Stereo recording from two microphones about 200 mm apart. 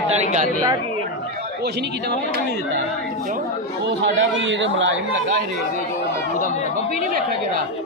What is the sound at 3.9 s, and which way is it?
Speech, 65° right (ahead or behind).